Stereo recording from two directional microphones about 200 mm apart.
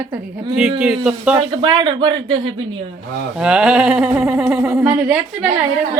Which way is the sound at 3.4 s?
5° right (ahead or behind).